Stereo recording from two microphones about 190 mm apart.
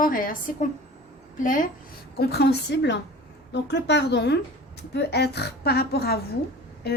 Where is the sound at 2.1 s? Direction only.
60° left (ahead or behind).